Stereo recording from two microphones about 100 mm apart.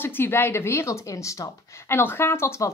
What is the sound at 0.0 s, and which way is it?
A woman's voice, 20° left (ahead or behind).